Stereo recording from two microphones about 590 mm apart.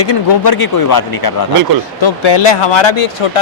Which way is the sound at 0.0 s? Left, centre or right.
Left.